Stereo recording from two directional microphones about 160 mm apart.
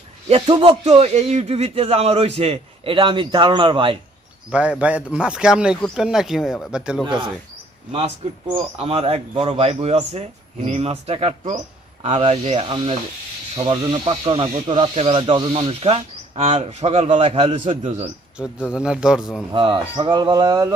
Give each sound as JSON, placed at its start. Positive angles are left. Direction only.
{"t": 0.3, "sound": "speech", "side_deg": -35}
{"t": 0.9, "sound": "speech", "side_deg": -45}
{"t": 4.5, "sound": "speech", "side_deg": -5}
{"t": 7.9, "sound": "speech", "side_deg": -40}
{"t": 18.7, "sound": "speech", "side_deg": -5}
{"t": 19.5, "sound": "speech", "side_deg": -30}